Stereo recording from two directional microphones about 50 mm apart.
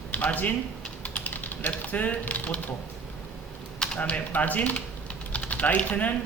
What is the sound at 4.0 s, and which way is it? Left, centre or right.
Speech, left.